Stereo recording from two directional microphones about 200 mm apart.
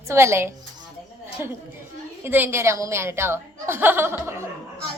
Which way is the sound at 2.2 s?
10° right (ahead or behind).